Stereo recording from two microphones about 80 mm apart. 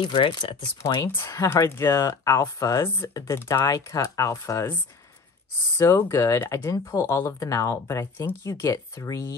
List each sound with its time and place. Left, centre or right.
0.0 s speech: left
1.0 s speech: left
3.6 s speech: left
5.9 s speech: left